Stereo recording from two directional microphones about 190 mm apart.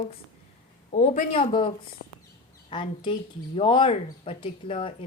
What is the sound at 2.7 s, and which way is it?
Speech, 25° left (ahead or behind).